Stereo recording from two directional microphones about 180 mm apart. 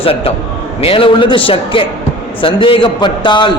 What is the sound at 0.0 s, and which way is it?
A man's voice, 30° left (ahead or behind).